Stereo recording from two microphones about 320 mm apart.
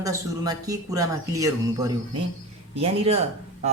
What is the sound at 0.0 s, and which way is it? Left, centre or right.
Speech, centre.